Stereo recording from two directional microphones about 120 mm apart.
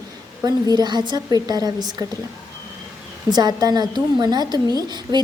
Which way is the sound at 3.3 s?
35° right (ahead or behind).